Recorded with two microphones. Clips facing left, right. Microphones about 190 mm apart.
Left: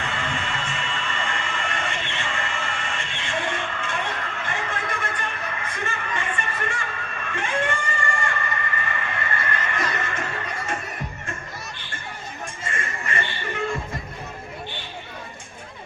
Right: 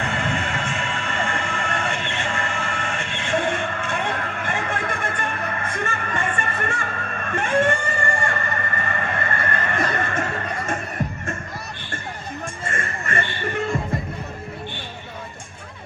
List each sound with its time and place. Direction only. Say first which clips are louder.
0.0 s music: right 4 dB; 45° right (ahead or behind)
12.7 s music: right 3 dB; 50° right (ahead or behind)